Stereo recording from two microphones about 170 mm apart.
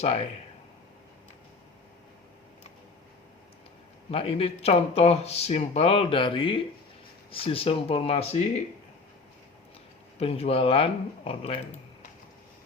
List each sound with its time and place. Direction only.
4.1 s speech: 35° left (ahead or behind)
10.2 s speech: 35° left (ahead or behind)